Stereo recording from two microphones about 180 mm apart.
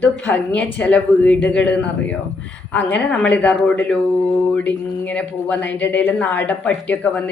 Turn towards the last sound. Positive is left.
turn(degrees=10)  # may be behind; listen again after turning